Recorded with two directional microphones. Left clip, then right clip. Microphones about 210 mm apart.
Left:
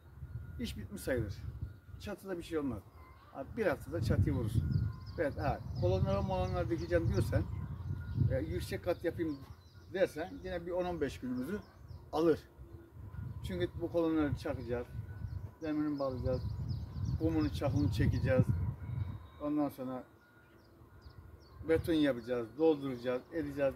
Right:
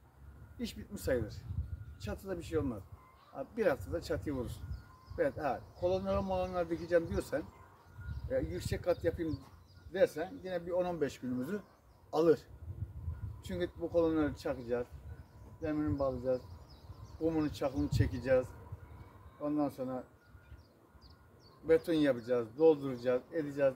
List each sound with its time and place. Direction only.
0.6 s speech: 5° left (ahead or behind)
21.6 s speech: centre (ahead or behind)